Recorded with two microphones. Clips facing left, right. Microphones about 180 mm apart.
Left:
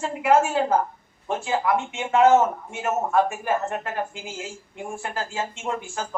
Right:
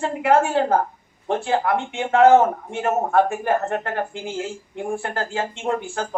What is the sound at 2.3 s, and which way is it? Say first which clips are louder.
Speech: right 4 dB; 35° right (ahead or behind).